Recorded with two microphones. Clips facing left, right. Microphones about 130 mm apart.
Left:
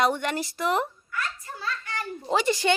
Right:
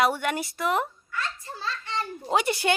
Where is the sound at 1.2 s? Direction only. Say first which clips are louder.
Even; 25° right (ahead or behind).